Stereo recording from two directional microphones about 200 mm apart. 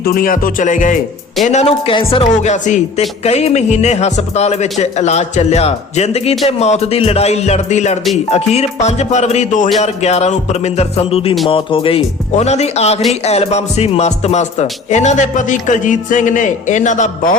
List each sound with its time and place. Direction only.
0.0 s speech: 45° left (ahead or behind)